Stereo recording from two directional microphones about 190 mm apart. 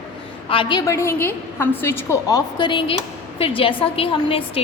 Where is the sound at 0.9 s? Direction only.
15° left (ahead or behind).